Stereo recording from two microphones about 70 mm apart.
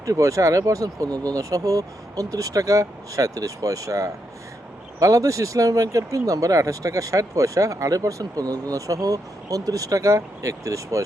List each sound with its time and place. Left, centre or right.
0.0 s speech: right